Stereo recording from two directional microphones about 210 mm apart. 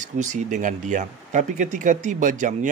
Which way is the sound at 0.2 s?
35° right (ahead or behind).